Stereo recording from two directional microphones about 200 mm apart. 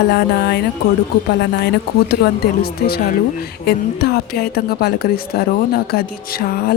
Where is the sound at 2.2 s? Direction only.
50° left (ahead or behind).